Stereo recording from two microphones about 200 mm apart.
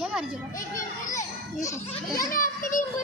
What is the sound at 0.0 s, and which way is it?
Children playing, 5° right (ahead or behind).